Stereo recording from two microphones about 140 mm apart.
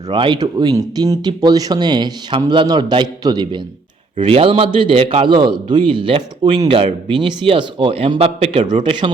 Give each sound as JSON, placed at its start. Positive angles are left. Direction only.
{"t": 0.1, "sound": "a man's voice", "side_deg": -35}
{"t": 8.8, "sound": "a man's voice", "side_deg": -35}